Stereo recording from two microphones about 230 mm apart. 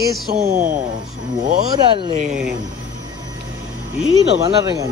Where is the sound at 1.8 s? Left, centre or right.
Right.